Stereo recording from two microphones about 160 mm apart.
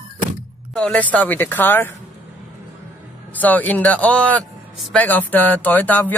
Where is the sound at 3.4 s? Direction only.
10° left (ahead or behind).